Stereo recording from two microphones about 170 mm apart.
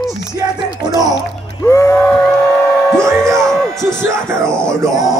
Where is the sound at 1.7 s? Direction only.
15° left (ahead or behind).